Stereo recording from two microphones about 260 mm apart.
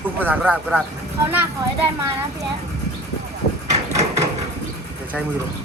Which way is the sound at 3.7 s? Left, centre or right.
Right.